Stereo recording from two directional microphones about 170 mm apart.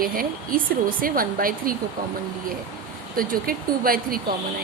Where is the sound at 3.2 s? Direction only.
55° right (ahead or behind).